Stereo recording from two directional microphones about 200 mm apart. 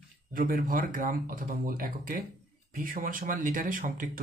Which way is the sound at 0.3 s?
45° right (ahead or behind).